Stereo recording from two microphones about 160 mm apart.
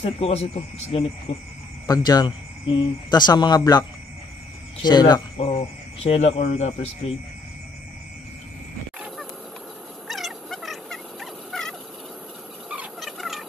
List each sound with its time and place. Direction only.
0.0 s speech: 40° left (ahead or behind)
1.9 s speech: 25° left (ahead or behind)
4.8 s speech: 25° left (ahead or behind)
5.5 s speech: 40° left (ahead or behind)
10.0 s frog: centre (ahead or behind)
12.6 s a sound: 5° right (ahead or behind)